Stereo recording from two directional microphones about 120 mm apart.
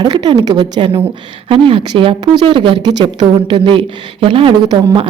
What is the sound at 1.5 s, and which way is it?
A woman's voice, 50° right (ahead or behind).